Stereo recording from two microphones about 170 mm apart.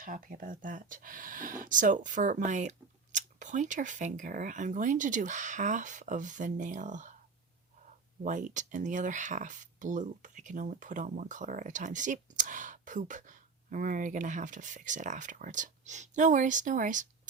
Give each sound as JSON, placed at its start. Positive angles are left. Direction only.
{"t": 0.0, "sound": "speech", "side_deg": -55}
{"t": 8.2, "sound": "speech", "side_deg": -50}